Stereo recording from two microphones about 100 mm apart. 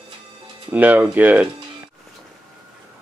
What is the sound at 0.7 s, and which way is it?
Speech, 15° right (ahead or behind).